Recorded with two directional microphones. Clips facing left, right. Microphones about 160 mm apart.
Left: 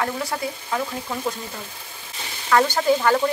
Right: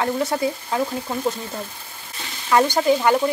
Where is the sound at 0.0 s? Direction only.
25° right (ahead or behind).